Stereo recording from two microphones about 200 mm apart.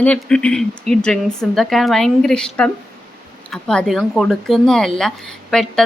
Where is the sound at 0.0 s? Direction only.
5° left (ahead or behind).